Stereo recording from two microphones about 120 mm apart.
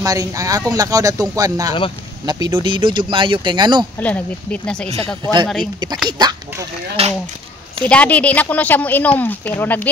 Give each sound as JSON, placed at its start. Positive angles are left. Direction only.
{"t": 0.0, "sound": "speech", "side_deg": -30}
{"t": 4.0, "sound": "speech", "side_deg": 10}
{"t": 6.0, "sound": "speech", "side_deg": -35}
{"t": 7.0, "sound": "speech", "side_deg": -55}
{"t": 7.8, "sound": "speech", "side_deg": 10}